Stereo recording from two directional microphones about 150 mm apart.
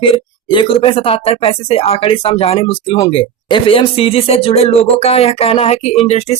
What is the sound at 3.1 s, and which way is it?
Speech, 35° left (ahead or behind).